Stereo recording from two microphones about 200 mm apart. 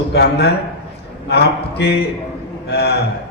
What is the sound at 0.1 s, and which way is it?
A man's voice, 55° left (ahead or behind).